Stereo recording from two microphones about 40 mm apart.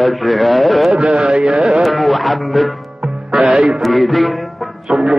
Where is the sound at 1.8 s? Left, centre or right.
Centre.